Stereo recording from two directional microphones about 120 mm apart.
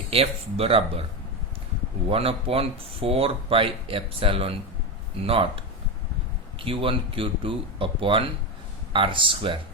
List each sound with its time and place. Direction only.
0.1 s speech: 55° right (ahead or behind)
2.0 s speech: 55° right (ahead or behind)